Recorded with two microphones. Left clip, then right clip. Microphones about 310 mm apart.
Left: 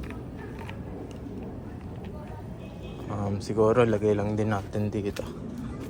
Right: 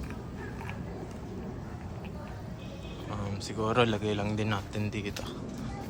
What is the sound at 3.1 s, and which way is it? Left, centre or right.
Speech, centre.